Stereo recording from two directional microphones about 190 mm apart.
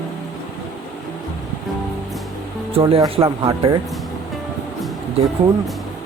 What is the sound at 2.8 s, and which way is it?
Speech, 25° right (ahead or behind).